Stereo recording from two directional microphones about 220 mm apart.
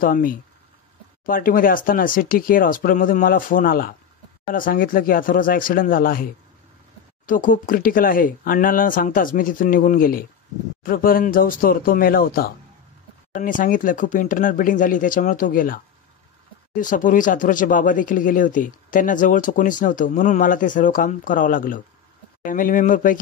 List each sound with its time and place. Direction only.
0.0 s speech: 40° left (ahead or behind)